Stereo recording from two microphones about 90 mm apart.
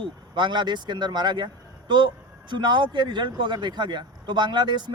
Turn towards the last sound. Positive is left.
turn(degrees=-55)  # may be behind; listen again after turning